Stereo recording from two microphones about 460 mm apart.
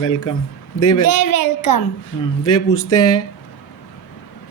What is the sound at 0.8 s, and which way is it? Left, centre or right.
A woman's voice, left.